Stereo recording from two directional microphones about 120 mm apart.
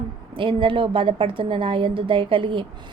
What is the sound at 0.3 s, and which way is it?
A woman's voice, 45° right (ahead or behind).